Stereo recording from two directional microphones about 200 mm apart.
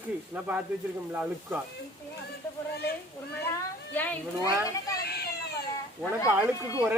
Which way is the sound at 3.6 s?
10° left (ahead or behind).